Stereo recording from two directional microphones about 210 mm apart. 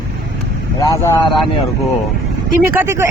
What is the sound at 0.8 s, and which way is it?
Speech, 20° left (ahead or behind).